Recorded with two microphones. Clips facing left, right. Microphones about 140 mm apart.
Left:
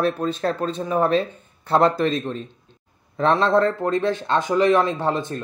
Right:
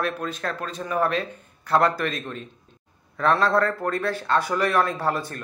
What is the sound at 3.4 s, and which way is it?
Speech, 20° left (ahead or behind).